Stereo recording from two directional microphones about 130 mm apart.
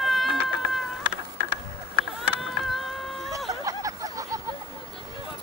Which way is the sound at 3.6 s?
25° right (ahead or behind).